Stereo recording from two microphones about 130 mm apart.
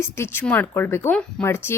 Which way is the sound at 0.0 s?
20° left (ahead or behind).